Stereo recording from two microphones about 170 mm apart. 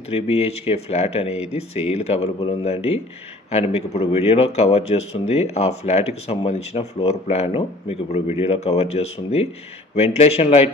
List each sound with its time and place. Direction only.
0.1 s speech: 35° left (ahead or behind)